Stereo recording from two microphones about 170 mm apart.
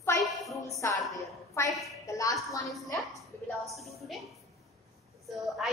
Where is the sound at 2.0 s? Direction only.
20° left (ahead or behind).